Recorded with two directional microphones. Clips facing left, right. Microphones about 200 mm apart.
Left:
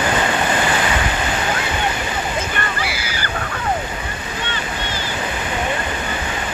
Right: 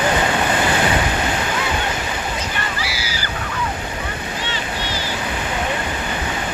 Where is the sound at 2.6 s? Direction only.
55° left (ahead or behind).